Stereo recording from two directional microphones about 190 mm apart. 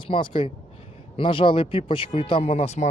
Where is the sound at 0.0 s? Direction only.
25° left (ahead or behind).